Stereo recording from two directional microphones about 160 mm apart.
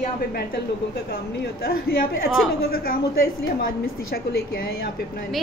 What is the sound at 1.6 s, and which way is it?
A woman's voice, 65° left (ahead or behind).